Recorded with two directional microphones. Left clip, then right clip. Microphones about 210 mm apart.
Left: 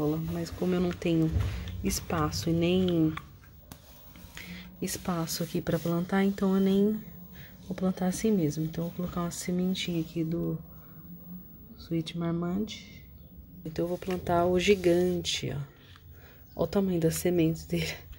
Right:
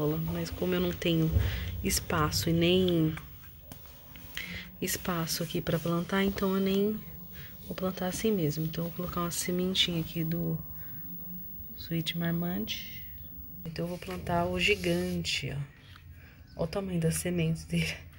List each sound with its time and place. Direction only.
0.0 s speech: 10° left (ahead or behind)
4.4 s speech: 5° left (ahead or behind)
11.8 s speech: 5° left (ahead or behind)
13.7 s speech: 40° left (ahead or behind)